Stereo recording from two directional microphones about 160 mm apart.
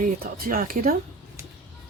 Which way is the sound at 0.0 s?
65° right (ahead or behind).